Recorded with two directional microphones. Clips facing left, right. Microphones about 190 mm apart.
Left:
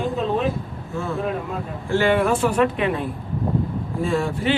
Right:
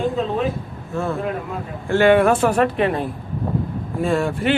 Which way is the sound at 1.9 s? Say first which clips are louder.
Right 4 dB; 60° right (ahead or behind).